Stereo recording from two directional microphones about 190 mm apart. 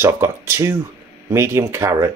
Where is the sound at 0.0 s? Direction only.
15° right (ahead or behind).